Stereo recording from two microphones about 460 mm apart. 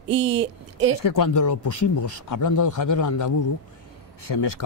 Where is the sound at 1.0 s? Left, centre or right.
Left.